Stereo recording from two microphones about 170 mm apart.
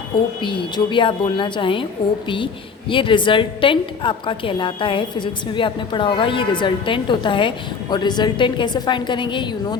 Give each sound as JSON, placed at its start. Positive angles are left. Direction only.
{"t": 0.4, "sound": "a woman's voice", "side_deg": 30}